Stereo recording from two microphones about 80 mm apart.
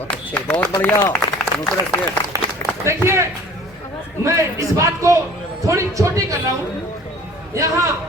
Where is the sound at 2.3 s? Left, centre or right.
Right.